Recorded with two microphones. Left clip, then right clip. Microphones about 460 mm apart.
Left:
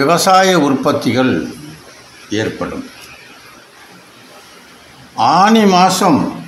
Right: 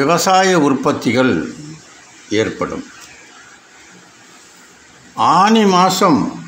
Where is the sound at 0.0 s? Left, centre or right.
Left.